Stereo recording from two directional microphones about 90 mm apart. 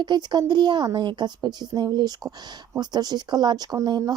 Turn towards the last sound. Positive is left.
turn(degrees=-45)  # may be behind; listen again after turning